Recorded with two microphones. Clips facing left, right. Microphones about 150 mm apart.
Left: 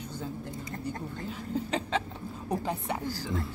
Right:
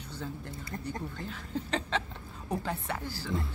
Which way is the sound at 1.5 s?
10° left (ahead or behind).